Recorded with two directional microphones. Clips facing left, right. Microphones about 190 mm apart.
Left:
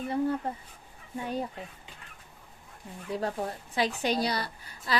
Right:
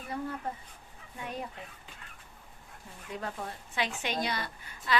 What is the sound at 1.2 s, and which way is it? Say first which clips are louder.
Speech: left 6 dB; 30° left (ahead or behind).